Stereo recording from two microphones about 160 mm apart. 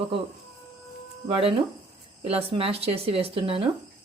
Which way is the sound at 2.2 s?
35° right (ahead or behind).